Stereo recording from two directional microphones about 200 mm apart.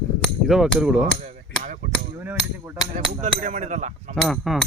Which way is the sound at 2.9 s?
40° right (ahead or behind).